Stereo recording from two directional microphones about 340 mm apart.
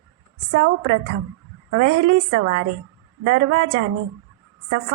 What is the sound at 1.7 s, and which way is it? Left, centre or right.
A woman's voice, right.